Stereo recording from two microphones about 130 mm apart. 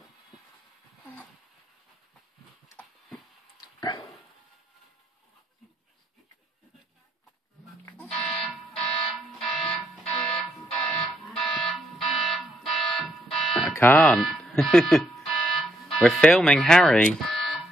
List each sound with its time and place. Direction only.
3.6 s a sound: 30° left (ahead or behind)
8.3 s fire alarm: centre (ahead or behind)
10.2 s alarm: 5° left (ahead or behind)
13.7 s speech: 10° left (ahead or behind)
15.5 s music: centre (ahead or behind)